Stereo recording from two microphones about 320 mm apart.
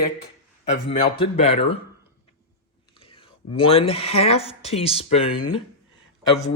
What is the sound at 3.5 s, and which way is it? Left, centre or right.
Speech, centre.